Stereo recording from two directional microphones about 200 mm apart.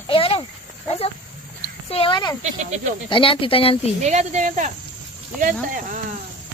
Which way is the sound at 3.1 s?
25° left (ahead or behind).